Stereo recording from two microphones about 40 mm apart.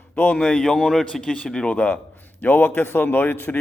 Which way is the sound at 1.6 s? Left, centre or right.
Left.